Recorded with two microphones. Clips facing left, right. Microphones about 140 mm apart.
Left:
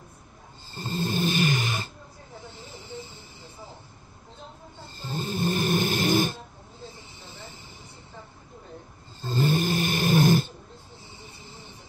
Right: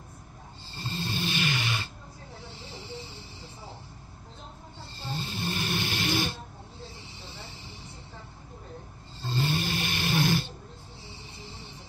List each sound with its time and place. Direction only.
0.7 s snoring: 45° left (ahead or behind)
5.0 s snoring: 45° left (ahead or behind)
9.3 s roar: 45° left (ahead or behind)